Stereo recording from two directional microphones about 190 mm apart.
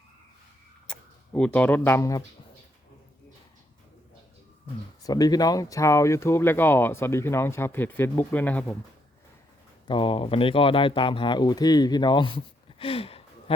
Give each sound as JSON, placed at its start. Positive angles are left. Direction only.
{"t": 0.9, "sound": "speech", "side_deg": 5}
{"t": 5.0, "sound": "speech", "side_deg": 20}
{"t": 9.8, "sound": "speech", "side_deg": 25}
{"t": 12.8, "sound": "a sound", "side_deg": 30}